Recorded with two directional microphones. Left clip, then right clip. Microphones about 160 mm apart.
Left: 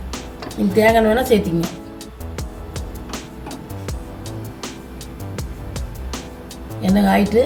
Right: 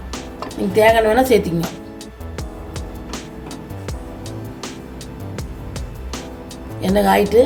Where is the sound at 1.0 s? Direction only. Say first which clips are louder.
Right 1 dB; 50° right (ahead or behind).